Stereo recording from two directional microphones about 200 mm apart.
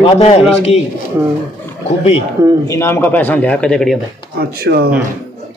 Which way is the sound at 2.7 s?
10° left (ahead or behind).